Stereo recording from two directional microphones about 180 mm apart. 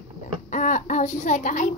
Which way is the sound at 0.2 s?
45° left (ahead or behind).